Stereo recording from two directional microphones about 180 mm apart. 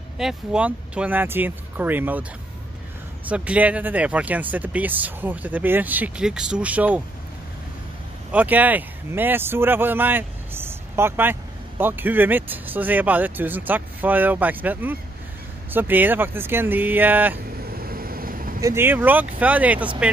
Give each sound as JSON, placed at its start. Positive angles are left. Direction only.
{"t": 0.2, "sound": "speech", "side_deg": -5}
{"t": 3.3, "sound": "speech", "side_deg": -5}
{"t": 8.3, "sound": "speech", "side_deg": -10}
{"t": 17.6, "sound": "vehicle", "side_deg": -55}
{"t": 18.6, "sound": "speech", "side_deg": -15}